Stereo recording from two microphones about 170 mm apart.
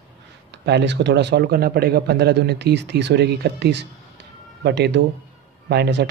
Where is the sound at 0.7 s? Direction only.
85° right.